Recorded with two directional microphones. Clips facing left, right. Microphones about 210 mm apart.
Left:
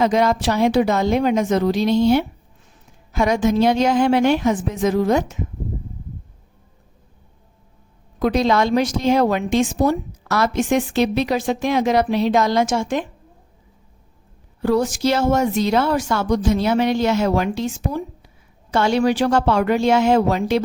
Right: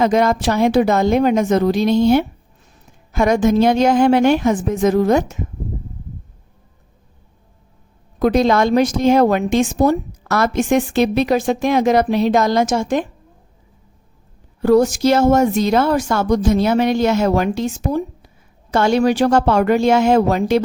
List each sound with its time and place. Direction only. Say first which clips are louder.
0.0 s speech: right 2 dB; 50° right (ahead or behind)
8.2 s speech: right 3 dB; 45° right (ahead or behind)
14.6 s speech: right 5 dB; 45° right (ahead or behind)